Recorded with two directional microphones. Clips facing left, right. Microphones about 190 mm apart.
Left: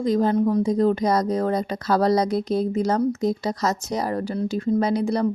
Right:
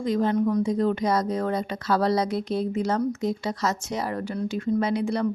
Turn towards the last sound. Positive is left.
turn(degrees=35)  # may be behind; listen again after turning